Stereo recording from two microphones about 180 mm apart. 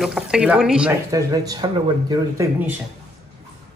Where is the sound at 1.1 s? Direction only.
20° right (ahead or behind).